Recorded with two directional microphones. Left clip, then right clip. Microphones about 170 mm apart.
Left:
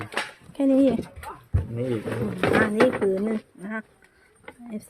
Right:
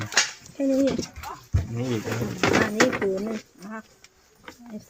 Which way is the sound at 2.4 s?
15° left (ahead or behind).